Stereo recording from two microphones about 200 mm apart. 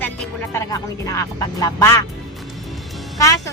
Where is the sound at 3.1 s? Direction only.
15° left (ahead or behind).